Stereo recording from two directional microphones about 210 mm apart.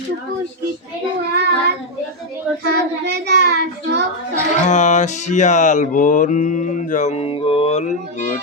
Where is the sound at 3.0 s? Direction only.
50° right (ahead or behind).